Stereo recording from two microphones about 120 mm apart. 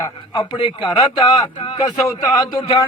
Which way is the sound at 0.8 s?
35° left (ahead or behind).